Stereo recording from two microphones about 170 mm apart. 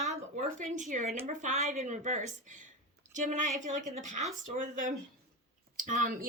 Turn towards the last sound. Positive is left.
turn(degrees=-55)  # may be behind; listen again after turning